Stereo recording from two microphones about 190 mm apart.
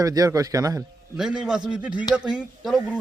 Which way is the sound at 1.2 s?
5° right (ahead or behind).